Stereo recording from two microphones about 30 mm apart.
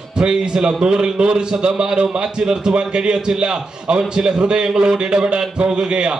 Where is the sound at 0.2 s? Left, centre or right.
Right.